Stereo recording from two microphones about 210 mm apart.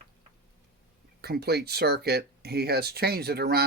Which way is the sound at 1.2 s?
50° right (ahead or behind).